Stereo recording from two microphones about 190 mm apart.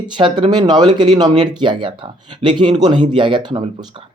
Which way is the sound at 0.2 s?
25° right (ahead or behind).